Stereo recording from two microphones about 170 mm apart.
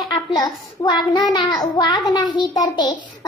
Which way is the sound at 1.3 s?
25° left (ahead or behind).